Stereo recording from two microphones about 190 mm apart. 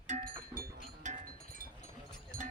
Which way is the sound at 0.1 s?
45° right (ahead or behind).